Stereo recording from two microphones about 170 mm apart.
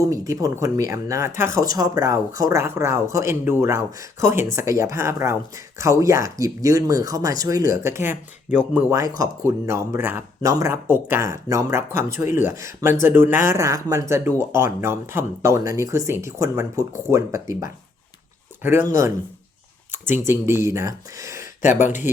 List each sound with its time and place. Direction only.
0.0 s speech: 20° right (ahead or behind)
21.4 s speech: 50° left (ahead or behind)